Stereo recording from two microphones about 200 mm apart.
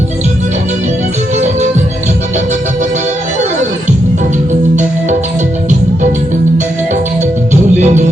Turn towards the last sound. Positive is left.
turn(degrees=-35)  # may be behind; listen again after turning